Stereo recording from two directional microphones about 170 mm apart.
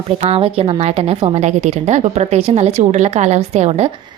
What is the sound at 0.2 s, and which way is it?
A woman's voice, 35° right (ahead or behind).